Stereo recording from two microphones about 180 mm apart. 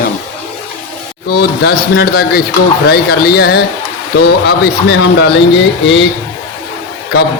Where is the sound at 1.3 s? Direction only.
60° left (ahead or behind).